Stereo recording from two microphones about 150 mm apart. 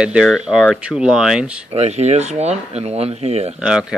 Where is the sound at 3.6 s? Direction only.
5° right (ahead or behind).